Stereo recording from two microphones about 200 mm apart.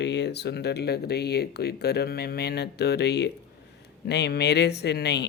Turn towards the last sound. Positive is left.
turn(degrees=55)  # may be behind; listen again after turning